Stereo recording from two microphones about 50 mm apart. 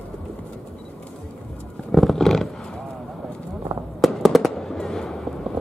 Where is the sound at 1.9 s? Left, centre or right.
Centre.